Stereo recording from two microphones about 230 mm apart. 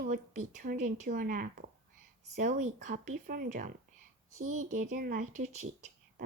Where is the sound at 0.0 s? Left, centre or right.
Right.